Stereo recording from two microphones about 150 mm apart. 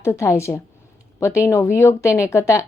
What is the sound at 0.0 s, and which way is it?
A woman's voice, 20° left (ahead or behind).